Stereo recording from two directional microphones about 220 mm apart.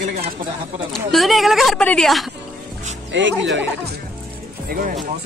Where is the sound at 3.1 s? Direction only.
55° right (ahead or behind).